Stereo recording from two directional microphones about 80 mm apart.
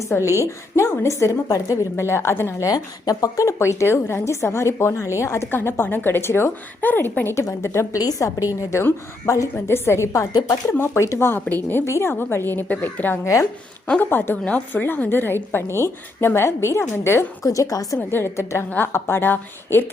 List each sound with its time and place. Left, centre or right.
0.3 s a woman's voice: left
2.6 s a woman's voice: left
7.3 s a woman's voice: left
8.7 s a woman's voice: left
13.2 s a woman's voice: left
14.0 s a woman's voice: left
17.4 s a woman's voice: left
18.1 s a woman's voice: left